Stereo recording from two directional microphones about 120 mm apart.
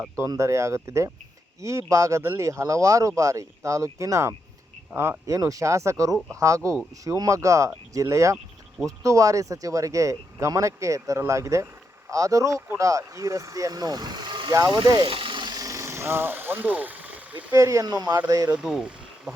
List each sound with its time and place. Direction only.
0.2 s speech: 25° right (ahead or behind); by 14.5 s 40° right (ahead or behind)
14.5 s speech: 30° right (ahead or behind)
15.1 s a sound: 45° right (ahead or behind); by 17.4 s 15° right (ahead or behind)
17.5 s speech: 25° right (ahead or behind)
18.5 s speech: 5° right (ahead or behind)